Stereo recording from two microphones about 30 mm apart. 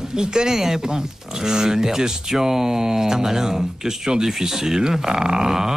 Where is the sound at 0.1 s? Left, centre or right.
Right.